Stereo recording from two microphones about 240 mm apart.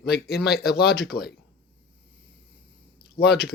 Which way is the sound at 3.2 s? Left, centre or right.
Left.